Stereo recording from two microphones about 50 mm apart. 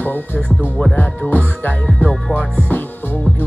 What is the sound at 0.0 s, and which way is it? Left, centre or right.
Music, left.